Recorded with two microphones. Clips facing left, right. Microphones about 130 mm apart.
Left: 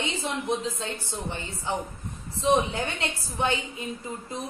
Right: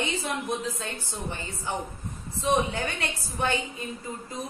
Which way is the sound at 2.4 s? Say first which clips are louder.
Left 2 dB; 25° left (ahead or behind).